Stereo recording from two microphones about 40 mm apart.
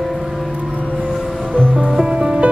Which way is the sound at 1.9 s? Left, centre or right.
Centre.